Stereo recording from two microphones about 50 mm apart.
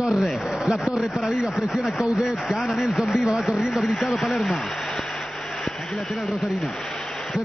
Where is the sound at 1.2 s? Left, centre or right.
Centre.